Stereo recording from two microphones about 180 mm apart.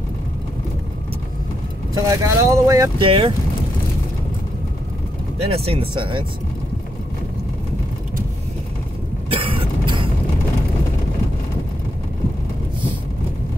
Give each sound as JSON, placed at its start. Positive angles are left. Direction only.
{"t": 2.0, "sound": "speech", "side_deg": -20}
{"t": 3.1, "sound": "speech", "side_deg": -30}
{"t": 5.5, "sound": "speech", "side_deg": -30}
{"t": 9.3, "sound": "vehicle", "side_deg": -30}